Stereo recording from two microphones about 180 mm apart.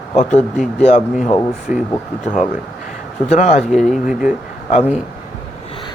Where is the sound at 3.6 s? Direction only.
Centre (ahead or behind).